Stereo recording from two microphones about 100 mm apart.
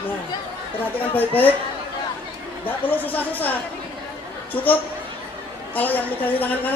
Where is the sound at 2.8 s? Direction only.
15° left (ahead or behind).